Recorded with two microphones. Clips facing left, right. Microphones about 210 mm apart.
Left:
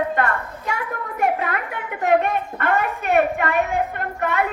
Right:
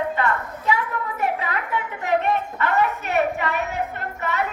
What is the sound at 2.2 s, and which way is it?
A woman's voice, 55° left (ahead or behind).